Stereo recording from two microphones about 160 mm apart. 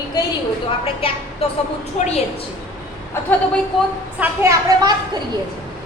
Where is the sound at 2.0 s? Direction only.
50° left (ahead or behind).